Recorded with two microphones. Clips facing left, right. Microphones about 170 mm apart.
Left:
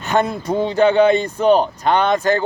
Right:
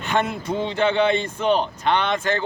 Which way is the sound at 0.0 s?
40° left (ahead or behind).